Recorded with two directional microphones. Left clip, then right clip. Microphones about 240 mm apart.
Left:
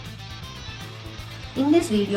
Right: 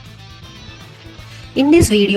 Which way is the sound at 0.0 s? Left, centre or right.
Centre.